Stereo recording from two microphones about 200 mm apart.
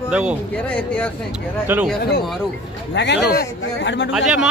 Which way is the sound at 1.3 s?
5° right (ahead or behind).